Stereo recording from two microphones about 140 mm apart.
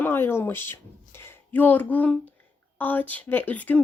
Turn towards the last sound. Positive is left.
turn(degrees=10)  # may be behind; listen again after turning